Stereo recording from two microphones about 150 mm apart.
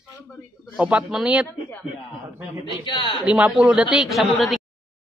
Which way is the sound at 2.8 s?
30° left (ahead or behind).